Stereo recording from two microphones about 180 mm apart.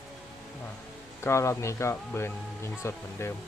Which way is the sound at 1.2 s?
15° left (ahead or behind).